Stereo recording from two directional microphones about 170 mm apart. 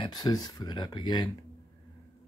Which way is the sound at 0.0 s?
25° left (ahead or behind).